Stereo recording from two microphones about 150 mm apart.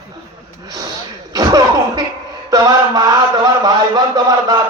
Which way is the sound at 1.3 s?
25° right (ahead or behind).